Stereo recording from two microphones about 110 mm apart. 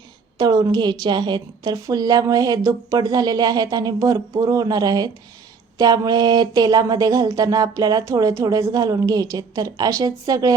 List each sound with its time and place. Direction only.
0.3 s a woman's voice: 40° right (ahead or behind)